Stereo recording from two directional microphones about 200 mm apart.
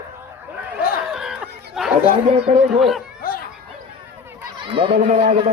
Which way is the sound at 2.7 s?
Centre (ahead or behind).